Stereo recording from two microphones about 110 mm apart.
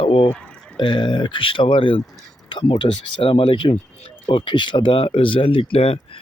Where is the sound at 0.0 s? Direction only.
55° left (ahead or behind).